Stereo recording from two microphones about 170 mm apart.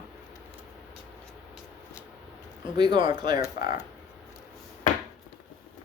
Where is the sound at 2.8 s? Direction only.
30° right (ahead or behind).